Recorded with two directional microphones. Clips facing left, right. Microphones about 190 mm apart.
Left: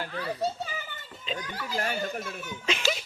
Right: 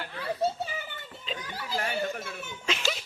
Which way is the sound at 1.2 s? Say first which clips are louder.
Left 3 dB; centre (ahead or behind).